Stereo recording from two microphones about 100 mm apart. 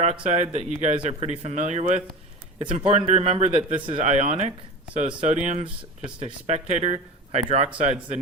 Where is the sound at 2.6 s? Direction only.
75° right (ahead or behind); by 4.4 s 90° right.